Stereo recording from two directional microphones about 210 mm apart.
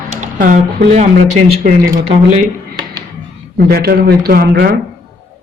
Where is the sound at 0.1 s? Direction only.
40° right (ahead or behind).